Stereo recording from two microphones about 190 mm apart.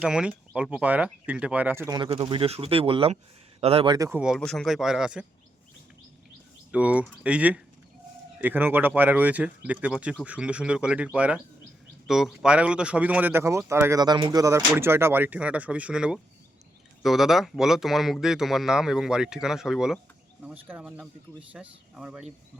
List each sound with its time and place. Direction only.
0.0 s speech: 5° right (ahead or behind)
2.0 s speech: 25° right (ahead or behind)
3.9 s speech: 15° right (ahead or behind)
4.2 s speech: centre (ahead or behind)
6.7 s speech: 5° right (ahead or behind)